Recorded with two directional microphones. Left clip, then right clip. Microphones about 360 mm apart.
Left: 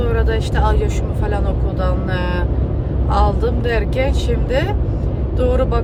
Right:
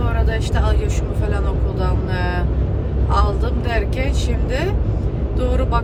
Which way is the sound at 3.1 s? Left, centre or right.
Centre.